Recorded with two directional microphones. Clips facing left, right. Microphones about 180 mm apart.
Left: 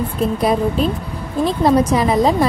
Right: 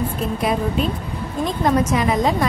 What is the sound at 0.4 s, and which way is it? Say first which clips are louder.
A woman's voice: left 3 dB; 35° left (ahead or behind).